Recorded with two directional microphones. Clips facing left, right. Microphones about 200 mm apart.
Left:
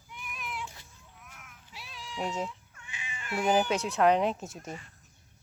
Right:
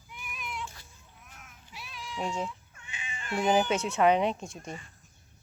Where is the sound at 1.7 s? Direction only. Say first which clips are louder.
Right 2 dB; 30° left (ahead or behind).